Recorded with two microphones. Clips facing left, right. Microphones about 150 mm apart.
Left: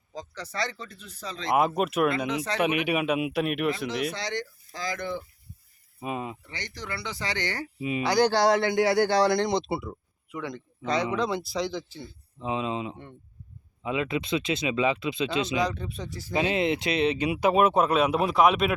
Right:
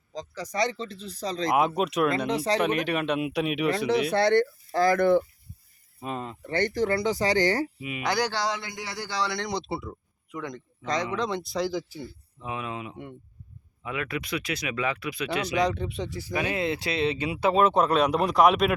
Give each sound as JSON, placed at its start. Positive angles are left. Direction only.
{"t": 0.3, "sound": "speech", "side_deg": -15}
{"t": 1.5, "sound": "speech", "side_deg": 0}
{"t": 2.1, "sound": "speech", "side_deg": -35}
{"t": 2.8, "sound": "speech", "side_deg": 10}
{"t": 4.1, "sound": "speech", "side_deg": -55}
{"t": 6.0, "sound": "speech", "side_deg": 10}
{"t": 6.4, "sound": "speech", "side_deg": -50}
{"t": 7.8, "sound": "speech", "side_deg": 30}
{"t": 8.3, "sound": "speech", "side_deg": 55}
{"t": 9.4, "sound": "speech", "side_deg": 20}
{"t": 12.0, "sound": "speech", "side_deg": 20}
{"t": 15.5, "sound": "speech", "side_deg": -20}
{"t": 16.3, "sound": "speech", "side_deg": 20}